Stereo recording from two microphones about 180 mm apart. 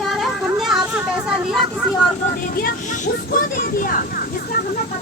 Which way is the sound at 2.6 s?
50° left (ahead or behind).